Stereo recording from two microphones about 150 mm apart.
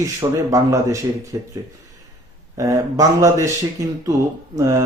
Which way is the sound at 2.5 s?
20° right (ahead or behind).